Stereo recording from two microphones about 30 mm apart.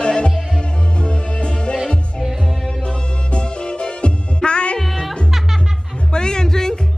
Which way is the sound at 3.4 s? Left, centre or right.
Left.